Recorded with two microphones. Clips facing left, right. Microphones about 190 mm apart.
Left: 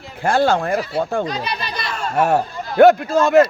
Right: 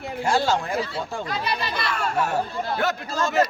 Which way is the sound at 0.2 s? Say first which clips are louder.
Left 6 dB; 55° left (ahead or behind).